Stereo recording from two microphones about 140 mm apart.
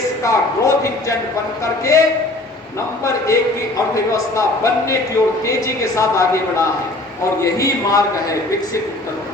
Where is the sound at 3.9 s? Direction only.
20° left (ahead or behind).